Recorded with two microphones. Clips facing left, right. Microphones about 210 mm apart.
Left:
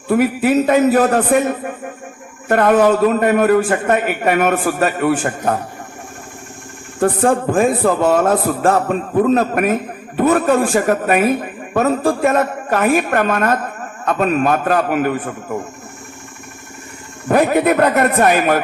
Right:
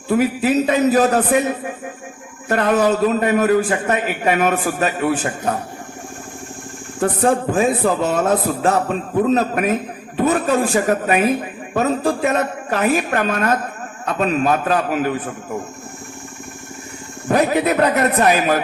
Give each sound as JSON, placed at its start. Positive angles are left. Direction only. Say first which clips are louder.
{"t": 0.1, "sound": "a man's voice", "louder": "left 2 dB", "side_deg": 50}
{"t": 7.0, "sound": "a man's voice", "louder": "left 2 dB", "side_deg": 55}
{"t": 17.2, "sound": "a man's voice", "louder": "left 3 dB", "side_deg": 55}